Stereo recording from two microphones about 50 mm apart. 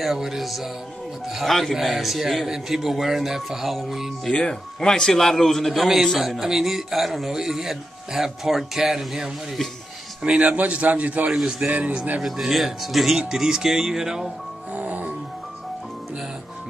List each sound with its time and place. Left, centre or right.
0.0 s a man's voice: centre
1.5 s a man's voice: centre
4.2 s a man's voice: centre
10.2 s a man's voice: right
11.2 s speech: centre
11.6 s speech: right
12.2 s a man's voice: centre
14.7 s music: right